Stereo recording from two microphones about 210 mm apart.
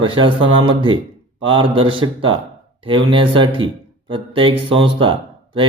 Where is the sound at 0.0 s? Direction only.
25° right (ahead or behind).